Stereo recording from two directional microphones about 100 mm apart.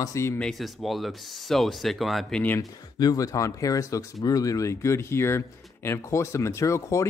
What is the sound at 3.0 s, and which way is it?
Speech, 40° left (ahead or behind).